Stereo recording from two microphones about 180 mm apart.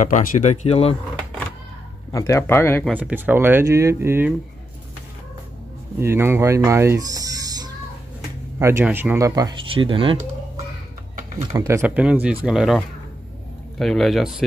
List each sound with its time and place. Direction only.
0.0 s speech: 45° left (ahead or behind)
2.1 s speech: 15° left (ahead or behind)
3.0 s speech: 10° right (ahead or behind)
5.9 s speech: 15° right (ahead or behind); by 10.1 s 30° right (ahead or behind)
11.5 s speech: 15° right (ahead or behind)